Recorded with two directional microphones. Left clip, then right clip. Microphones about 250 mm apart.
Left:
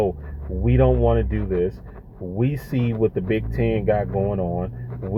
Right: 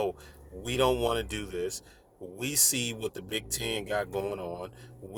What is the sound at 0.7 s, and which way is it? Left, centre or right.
Speech, right.